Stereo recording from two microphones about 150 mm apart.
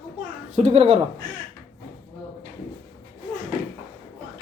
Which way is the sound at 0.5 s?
45° right (ahead or behind).